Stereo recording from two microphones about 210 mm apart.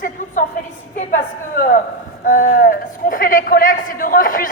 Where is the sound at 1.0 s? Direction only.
40° left (ahead or behind).